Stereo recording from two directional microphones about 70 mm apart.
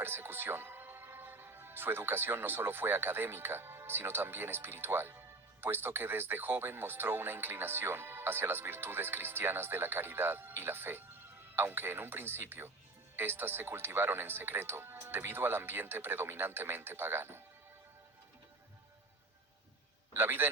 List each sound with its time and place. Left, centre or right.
0.0 s a man's voice: right
20.1 s a man's voice: right